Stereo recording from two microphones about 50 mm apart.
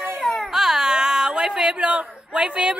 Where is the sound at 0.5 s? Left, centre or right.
Centre.